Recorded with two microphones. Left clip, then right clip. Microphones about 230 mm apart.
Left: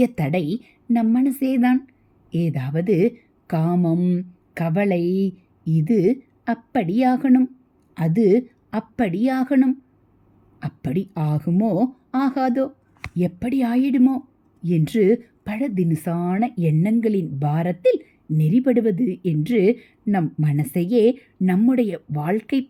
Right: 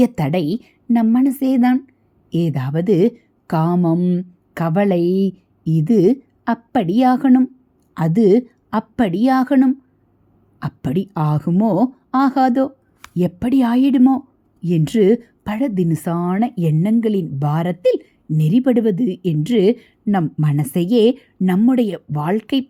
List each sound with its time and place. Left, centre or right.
0.0 s speech: centre